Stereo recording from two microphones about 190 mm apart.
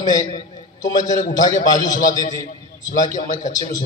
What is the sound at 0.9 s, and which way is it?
Speech, 40° left (ahead or behind).